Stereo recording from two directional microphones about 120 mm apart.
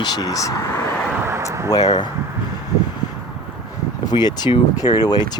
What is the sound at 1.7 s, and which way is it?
Speech, 35° left (ahead or behind).